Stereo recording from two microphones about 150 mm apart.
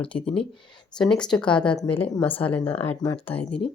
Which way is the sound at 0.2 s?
5° left (ahead or behind).